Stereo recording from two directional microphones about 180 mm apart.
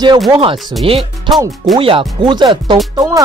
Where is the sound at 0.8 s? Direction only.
30° right (ahead or behind).